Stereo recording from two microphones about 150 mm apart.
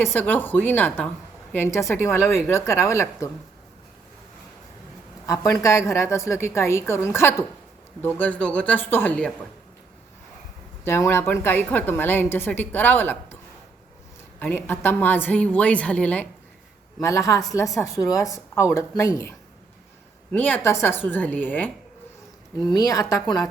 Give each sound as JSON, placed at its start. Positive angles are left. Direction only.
{"t": 0.0, "sound": "a woman's voice", "side_deg": 15}
{"t": 5.2, "sound": "a woman's voice", "side_deg": 20}
{"t": 10.8, "sound": "a woman's voice", "side_deg": 15}
{"t": 14.3, "sound": "a woman's voice", "side_deg": 15}
{"t": 17.0, "sound": "a woman's voice", "side_deg": 20}
{"t": 20.3, "sound": "a woman's voice", "side_deg": 10}
{"t": 22.7, "sound": "a woman's voice", "side_deg": 25}